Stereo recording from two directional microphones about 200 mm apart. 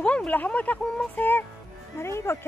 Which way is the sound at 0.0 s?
5° left (ahead or behind).